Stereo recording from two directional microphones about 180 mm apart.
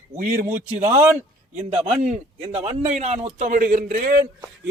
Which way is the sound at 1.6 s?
35° right (ahead or behind).